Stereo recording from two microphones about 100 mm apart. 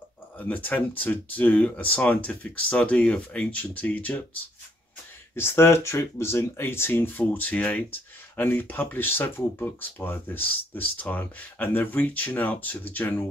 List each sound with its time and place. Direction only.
0.4 s speech: 15° left (ahead or behind)
5.3 s speech: 25° left (ahead or behind)